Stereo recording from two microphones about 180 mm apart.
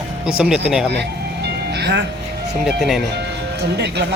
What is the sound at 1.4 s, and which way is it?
Music, 70° right (ahead or behind).